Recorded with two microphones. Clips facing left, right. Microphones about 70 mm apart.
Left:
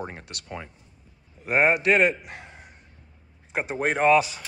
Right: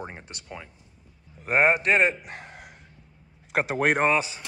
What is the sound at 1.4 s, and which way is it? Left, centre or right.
Speech, right.